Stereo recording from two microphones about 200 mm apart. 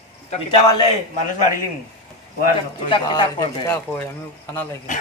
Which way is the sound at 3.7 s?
10° left (ahead or behind).